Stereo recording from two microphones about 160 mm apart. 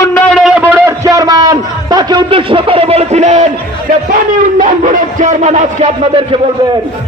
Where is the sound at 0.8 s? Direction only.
20° right (ahead or behind); by 3.5 s 45° right (ahead or behind).